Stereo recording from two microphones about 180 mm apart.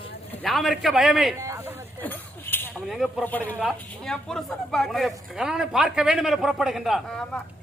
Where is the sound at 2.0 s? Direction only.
10° left (ahead or behind).